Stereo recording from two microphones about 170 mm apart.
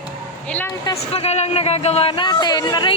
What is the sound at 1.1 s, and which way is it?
Speech, 35° left (ahead or behind).